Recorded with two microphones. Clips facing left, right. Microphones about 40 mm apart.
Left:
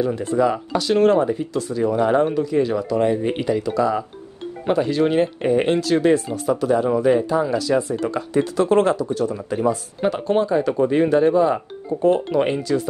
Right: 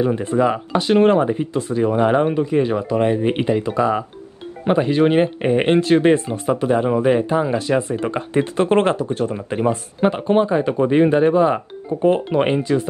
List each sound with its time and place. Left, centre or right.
0.0 s speech: right